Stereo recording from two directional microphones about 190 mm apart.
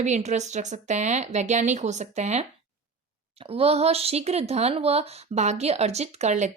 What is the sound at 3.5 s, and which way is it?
Speech, 30° right (ahead or behind).